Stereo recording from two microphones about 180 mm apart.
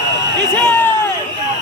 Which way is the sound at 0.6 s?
10° left (ahead or behind).